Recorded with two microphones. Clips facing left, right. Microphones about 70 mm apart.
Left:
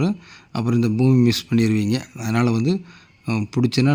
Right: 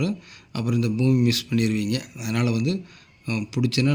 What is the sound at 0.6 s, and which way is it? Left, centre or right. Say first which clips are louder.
Speech: left 5 dB; left.